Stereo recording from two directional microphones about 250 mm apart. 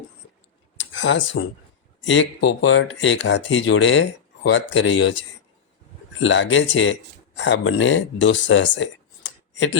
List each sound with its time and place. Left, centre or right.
0.9 s speech: left
6.1 s speech: left